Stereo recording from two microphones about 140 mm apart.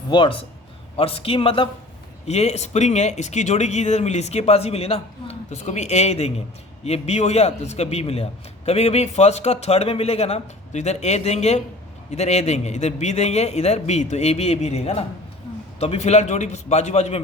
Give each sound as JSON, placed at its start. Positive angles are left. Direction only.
{"t": 0.1, "sound": "a man's voice", "side_deg": 35}
{"t": 2.2, "sound": "a man's voice", "side_deg": 50}